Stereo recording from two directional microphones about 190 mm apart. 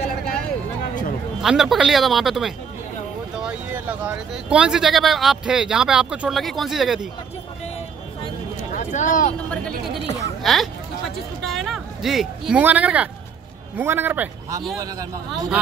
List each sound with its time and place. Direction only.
1.4 s speech: centre (ahead or behind)
8.7 s speech: 45° left (ahead or behind)
10.4 s a sound: centre (ahead or behind)
13.7 s speech: 10° right (ahead or behind)